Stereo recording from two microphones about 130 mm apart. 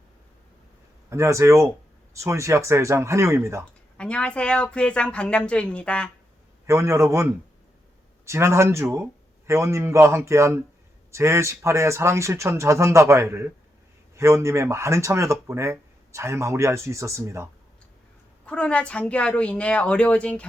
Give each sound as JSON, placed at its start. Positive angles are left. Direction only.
{"t": 1.1, "sound": "speech", "side_deg": -25}
{"t": 3.9, "sound": "a woman's voice", "side_deg": 10}
{"t": 6.7, "sound": "speech", "side_deg": -20}
{"t": 18.4, "sound": "a woman's voice", "side_deg": 10}